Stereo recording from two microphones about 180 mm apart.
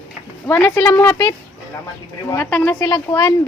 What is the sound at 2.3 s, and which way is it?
A woman's voice, 10° left (ahead or behind).